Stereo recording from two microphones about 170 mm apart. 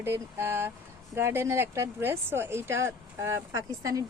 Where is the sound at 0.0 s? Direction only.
15° right (ahead or behind).